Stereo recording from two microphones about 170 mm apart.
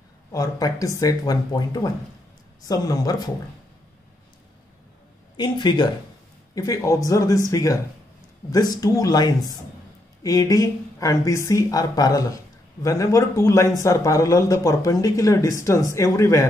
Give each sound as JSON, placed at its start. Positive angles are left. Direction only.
{"t": 0.3, "sound": "speech", "side_deg": 20}
{"t": 5.4, "sound": "speech", "side_deg": 25}